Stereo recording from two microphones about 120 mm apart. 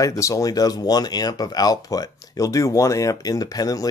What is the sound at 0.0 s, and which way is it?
Speech, 30° left (ahead or behind).